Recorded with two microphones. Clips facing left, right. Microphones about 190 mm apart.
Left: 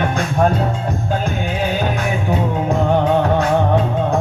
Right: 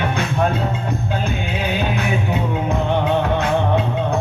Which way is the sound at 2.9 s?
40° left (ahead or behind).